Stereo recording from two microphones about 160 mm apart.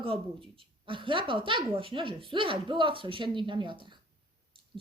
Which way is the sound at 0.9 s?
30° right (ahead or behind).